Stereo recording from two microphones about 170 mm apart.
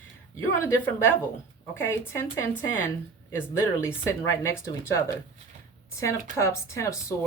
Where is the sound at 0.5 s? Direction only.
15° left (ahead or behind).